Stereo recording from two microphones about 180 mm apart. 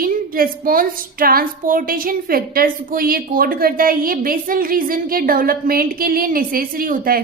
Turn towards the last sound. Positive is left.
turn(degrees=-50)  # may be behind; listen again after turning